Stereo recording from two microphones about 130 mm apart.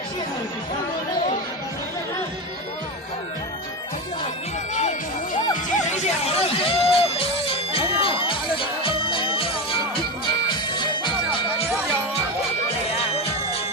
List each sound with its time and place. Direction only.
4.7 s music: 65° left (ahead or behind); by 11.7 s 40° left (ahead or behind)
13.0 s music: 50° left (ahead or behind)